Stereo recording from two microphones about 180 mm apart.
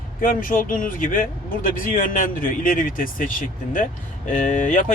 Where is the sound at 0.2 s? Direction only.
50° left (ahead or behind).